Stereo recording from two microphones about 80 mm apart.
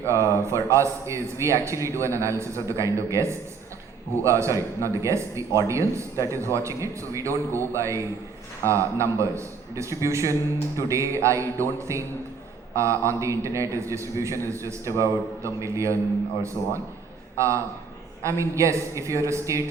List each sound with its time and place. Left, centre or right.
0.1 s a man's voice: right
16.6 s a man's voice: left
17.3 s a man's voice: right